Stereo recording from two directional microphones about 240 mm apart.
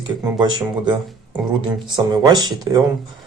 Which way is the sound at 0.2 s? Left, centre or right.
Centre.